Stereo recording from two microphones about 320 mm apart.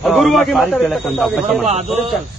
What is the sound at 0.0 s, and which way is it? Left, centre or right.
Speech, centre.